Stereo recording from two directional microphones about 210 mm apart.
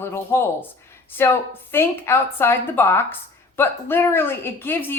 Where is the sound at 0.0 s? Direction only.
10° left (ahead or behind).